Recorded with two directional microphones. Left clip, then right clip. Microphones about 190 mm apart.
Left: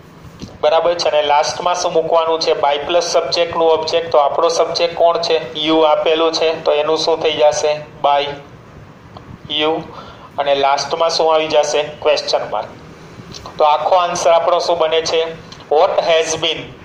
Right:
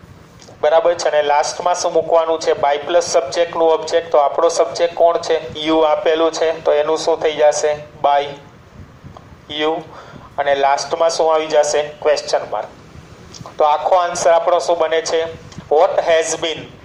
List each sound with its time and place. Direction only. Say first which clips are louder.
0.6 s a man's voice: even; 25° right (ahead or behind)
9.5 s a man's voice: left 2 dB; 25° right (ahead or behind)
13.6 s a man's voice: left 1 dB; 25° right (ahead or behind)